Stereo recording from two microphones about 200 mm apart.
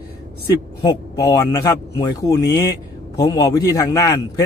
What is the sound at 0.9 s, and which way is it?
A man's voice, 15° left (ahead or behind).